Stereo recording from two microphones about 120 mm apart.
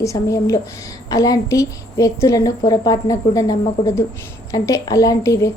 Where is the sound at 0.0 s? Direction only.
25° left (ahead or behind).